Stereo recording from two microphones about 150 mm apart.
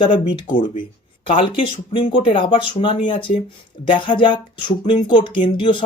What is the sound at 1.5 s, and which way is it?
Speech, 35° left (ahead or behind).